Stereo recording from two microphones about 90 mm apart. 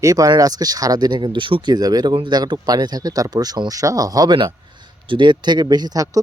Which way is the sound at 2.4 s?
45° right (ahead or behind).